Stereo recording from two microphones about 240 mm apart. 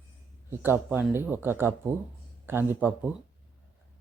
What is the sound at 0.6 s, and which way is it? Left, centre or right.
Speech, centre.